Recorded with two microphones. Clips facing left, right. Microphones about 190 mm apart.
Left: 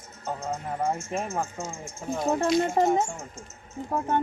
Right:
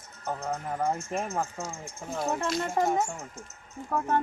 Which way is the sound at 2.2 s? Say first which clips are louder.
Left 6 dB; 35° left (ahead or behind).